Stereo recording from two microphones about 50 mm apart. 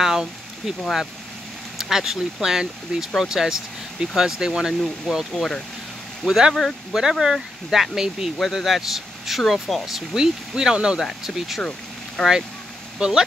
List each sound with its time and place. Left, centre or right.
0.0 s a sound: centre
1.8 s speech: centre
5.3 s speech: centre
6.2 s speech: centre
11.0 s speech: centre
12.2 s speech: centre
13.0 s speech: centre